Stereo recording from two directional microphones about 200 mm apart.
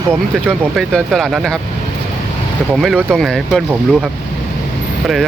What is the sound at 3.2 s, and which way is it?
Speech, centre (ahead or behind).